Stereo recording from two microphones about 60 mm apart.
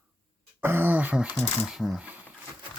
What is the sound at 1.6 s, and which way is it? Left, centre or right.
Speech, centre.